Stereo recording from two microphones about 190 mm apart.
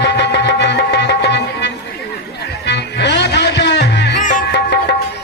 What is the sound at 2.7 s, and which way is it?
Music, 65° left (ahead or behind).